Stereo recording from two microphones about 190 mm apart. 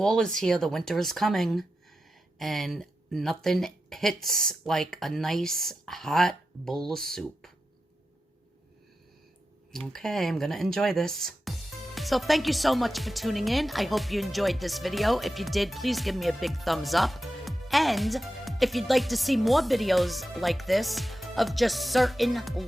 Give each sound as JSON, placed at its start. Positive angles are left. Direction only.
{"t": 0.0, "sound": "speech", "side_deg": 5}
{"t": 9.7, "sound": "speech", "side_deg": 0}